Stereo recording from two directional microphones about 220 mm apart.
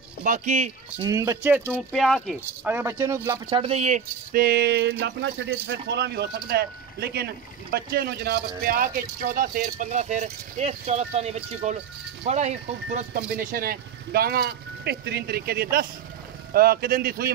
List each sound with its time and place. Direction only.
0.2 s speech: 35° right (ahead or behind)
1.0 s speech: 15° right (ahead or behind)
1.9 s speech: centre (ahead or behind); by 17.3 s 45° right (ahead or behind)